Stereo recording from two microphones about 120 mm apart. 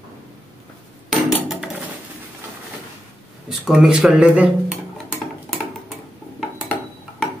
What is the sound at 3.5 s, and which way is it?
Speech, 5° right (ahead or behind).